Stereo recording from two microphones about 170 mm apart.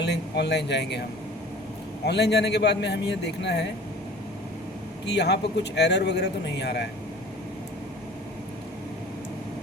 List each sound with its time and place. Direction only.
0.0 s speech: 85° left
2.0 s speech: 80° left
5.0 s speech: 85° left